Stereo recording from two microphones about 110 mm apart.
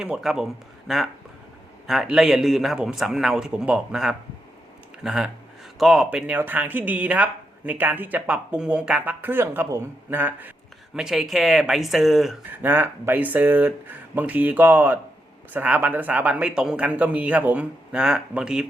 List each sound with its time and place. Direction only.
0.0 s a man's voice: 5° right (ahead or behind)
10.9 s a man's voice: 5° right (ahead or behind)
12.6 s speech: 20° right (ahead or behind)